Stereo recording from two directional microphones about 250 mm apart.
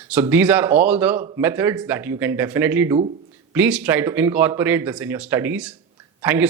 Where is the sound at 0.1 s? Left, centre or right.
Centre.